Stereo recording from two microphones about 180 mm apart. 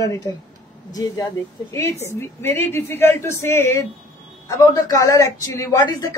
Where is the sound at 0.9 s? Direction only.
20° left (ahead or behind).